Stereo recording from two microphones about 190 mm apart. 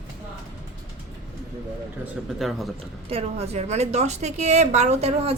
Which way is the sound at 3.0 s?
30° right (ahead or behind).